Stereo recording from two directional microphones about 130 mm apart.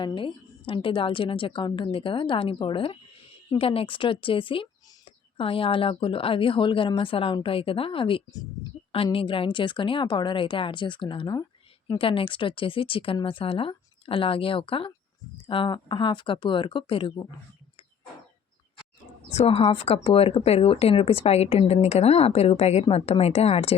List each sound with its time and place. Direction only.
0.0 s a woman's voice: 40° left (ahead or behind)
19.4 s a woman's voice: 45° left (ahead or behind)